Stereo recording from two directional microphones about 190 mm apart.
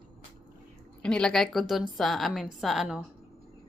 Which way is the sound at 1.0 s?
5° left (ahead or behind).